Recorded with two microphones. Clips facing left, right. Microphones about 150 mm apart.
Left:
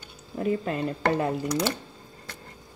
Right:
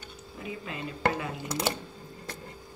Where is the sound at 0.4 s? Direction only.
50° left (ahead or behind).